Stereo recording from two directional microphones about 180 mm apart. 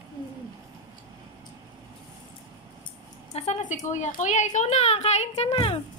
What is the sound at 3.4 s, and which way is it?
A woman's voice, 40° left (ahead or behind).